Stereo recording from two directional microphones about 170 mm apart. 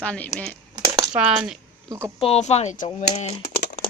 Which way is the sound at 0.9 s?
25° right (ahead or behind).